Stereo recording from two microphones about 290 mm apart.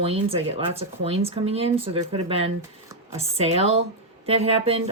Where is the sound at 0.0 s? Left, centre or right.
Centre.